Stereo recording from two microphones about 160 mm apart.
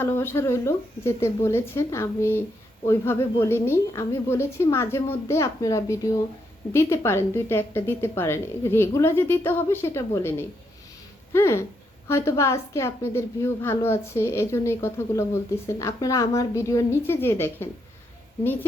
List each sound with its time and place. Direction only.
0.0 s a woman's voice: 15° left (ahead or behind)